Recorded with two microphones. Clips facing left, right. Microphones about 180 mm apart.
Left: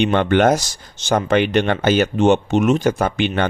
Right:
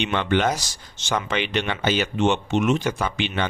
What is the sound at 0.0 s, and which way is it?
Speech, 50° left (ahead or behind).